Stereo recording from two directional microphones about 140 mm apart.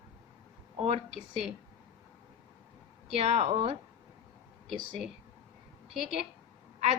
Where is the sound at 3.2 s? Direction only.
50° right (ahead or behind).